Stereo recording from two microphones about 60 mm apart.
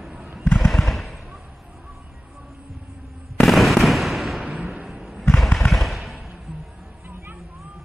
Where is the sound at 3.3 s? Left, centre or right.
Centre.